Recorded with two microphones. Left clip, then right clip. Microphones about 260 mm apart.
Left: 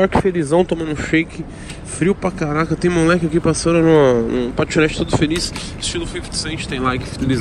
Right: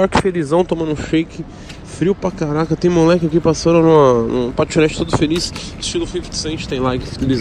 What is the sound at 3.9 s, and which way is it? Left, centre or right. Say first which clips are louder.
Speech: right 2 dB; left.